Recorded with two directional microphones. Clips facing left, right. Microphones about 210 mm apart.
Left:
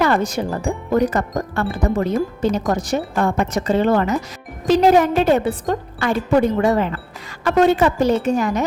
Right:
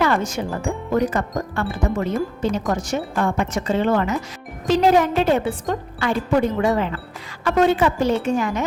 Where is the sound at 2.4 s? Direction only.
40° left (ahead or behind).